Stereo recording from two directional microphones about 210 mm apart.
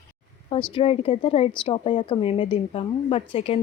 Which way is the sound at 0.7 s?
25° left (ahead or behind).